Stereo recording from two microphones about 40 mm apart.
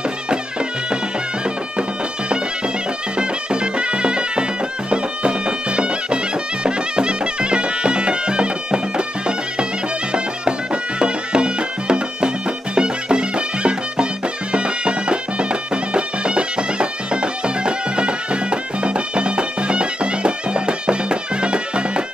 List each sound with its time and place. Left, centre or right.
0.3 s music: right
3.2 s music: right